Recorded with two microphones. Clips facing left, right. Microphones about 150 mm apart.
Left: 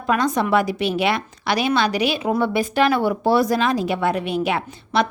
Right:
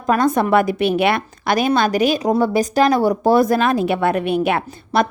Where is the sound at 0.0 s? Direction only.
45° right (ahead or behind).